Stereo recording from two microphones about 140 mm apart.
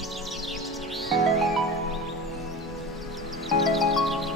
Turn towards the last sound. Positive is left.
turn(degrees=0)  # may be behind; listen again after turning